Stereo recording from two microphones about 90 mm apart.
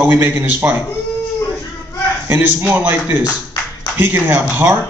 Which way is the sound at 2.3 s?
20° right (ahead or behind).